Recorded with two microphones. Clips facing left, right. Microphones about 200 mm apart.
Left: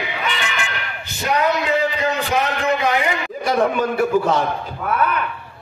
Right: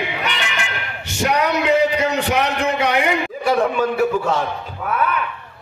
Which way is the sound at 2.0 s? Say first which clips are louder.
Right 1 dB; 75° right (ahead or behind).